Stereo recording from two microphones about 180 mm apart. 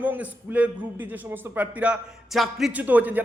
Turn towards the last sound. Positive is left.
turn(degrees=-10)  # may be behind; listen again after turning